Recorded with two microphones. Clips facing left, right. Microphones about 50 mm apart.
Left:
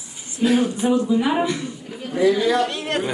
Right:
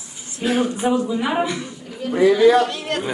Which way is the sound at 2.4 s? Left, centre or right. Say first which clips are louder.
Right 6 dB; right.